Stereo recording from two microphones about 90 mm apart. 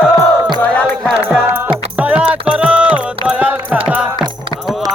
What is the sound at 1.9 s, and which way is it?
Music, 15° right (ahead or behind).